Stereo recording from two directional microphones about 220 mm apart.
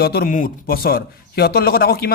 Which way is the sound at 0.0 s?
45° left (ahead or behind).